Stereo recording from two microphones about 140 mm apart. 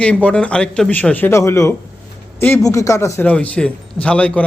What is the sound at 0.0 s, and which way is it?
Speech, 10° left (ahead or behind).